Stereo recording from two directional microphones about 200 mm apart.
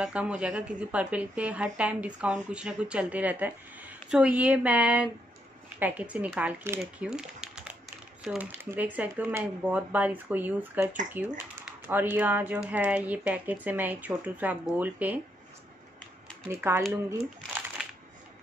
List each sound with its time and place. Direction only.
0.0 s a woman's voice: 5° right (ahead or behind)
16.4 s speech: 10° right (ahead or behind)
16.8 s crumpling: 5° right (ahead or behind)